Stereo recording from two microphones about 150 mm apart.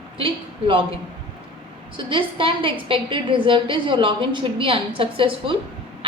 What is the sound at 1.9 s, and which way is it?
A woman's voice, 35° right (ahead or behind).